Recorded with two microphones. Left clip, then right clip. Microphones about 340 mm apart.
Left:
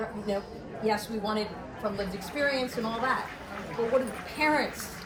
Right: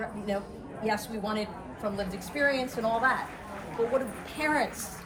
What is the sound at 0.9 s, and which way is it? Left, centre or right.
A woman's voice, right.